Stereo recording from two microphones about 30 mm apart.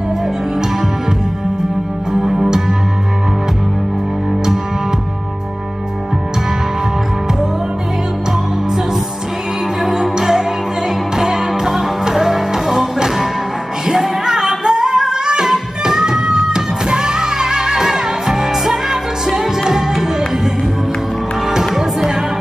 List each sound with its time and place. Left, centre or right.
2.2 s music: centre
9.8 s music: centre